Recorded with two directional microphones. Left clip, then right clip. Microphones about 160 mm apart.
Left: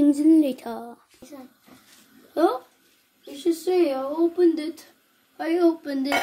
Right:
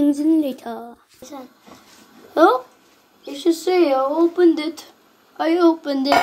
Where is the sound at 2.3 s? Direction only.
5° left (ahead or behind).